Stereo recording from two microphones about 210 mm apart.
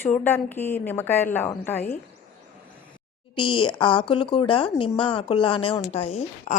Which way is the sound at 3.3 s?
20° left (ahead or behind).